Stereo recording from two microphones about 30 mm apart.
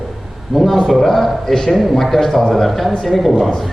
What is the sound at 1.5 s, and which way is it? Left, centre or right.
Speech, centre.